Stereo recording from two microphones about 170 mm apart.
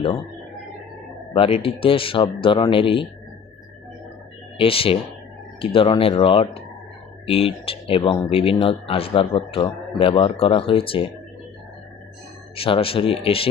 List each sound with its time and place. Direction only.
1.3 s speech: 35° left (ahead or behind)
4.5 s speech: 35° left (ahead or behind)
12.5 s speech: 35° left (ahead or behind)